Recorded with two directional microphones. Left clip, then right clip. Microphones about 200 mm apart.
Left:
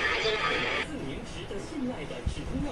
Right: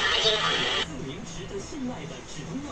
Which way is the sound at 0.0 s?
5° right (ahead or behind).